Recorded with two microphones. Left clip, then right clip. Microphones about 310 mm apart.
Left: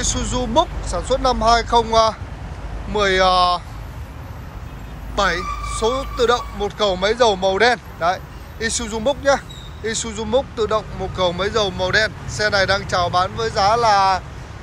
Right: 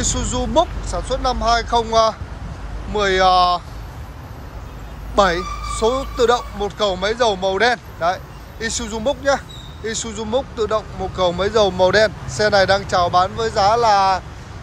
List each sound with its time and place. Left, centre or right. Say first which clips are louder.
0.0 s speech: even; centre
5.1 s speech: right 3 dB; centre